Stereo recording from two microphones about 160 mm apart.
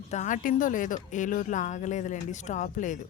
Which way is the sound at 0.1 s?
50° left (ahead or behind).